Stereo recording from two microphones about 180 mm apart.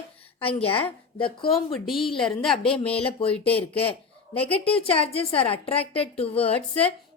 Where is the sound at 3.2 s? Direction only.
30° left (ahead or behind).